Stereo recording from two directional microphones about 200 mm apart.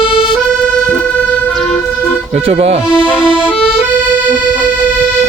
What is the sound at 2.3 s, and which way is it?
Music, 30° right (ahead or behind).